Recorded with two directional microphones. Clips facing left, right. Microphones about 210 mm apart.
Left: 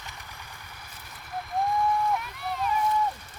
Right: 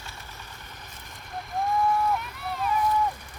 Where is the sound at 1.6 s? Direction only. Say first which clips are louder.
Right 1 dB; centre (ahead or behind).